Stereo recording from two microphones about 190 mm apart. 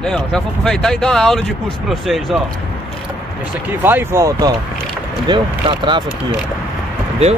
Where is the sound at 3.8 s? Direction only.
10° right (ahead or behind).